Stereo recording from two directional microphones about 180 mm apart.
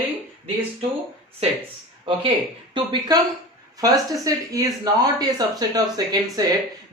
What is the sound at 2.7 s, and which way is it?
Speech, 25° right (ahead or behind).